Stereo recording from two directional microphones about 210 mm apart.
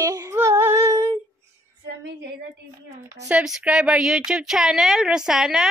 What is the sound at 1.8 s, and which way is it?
Speech, 55° right (ahead or behind).